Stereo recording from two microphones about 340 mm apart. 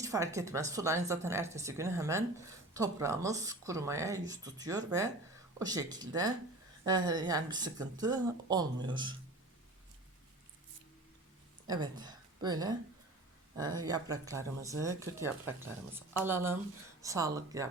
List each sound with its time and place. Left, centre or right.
0.0 s speech: centre
11.7 s a woman's voice: centre